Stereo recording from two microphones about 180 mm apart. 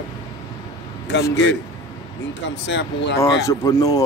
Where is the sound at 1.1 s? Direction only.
85° left.